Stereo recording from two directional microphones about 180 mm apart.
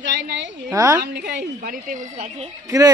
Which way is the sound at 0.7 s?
15° right (ahead or behind).